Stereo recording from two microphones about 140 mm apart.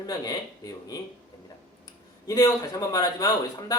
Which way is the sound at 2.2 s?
25° left (ahead or behind).